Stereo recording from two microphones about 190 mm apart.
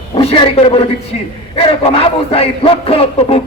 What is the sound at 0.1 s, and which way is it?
A man's voice, 30° left (ahead or behind).